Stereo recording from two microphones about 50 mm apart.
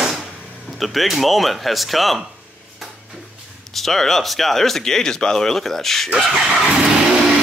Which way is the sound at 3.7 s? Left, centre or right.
Centre.